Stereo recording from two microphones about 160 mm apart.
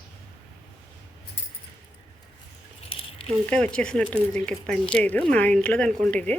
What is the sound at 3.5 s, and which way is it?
Speech, 5° left (ahead or behind).